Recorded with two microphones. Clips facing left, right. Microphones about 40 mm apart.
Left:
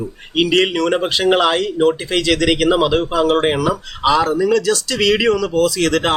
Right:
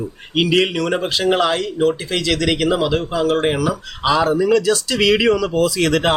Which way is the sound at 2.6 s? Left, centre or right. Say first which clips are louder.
Left 3 dB; centre.